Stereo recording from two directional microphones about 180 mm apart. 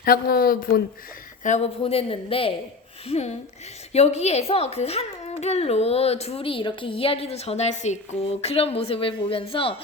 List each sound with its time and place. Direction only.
0.0 s speech: 55° left (ahead or behind)
1.5 s a woman's voice: 40° left (ahead or behind)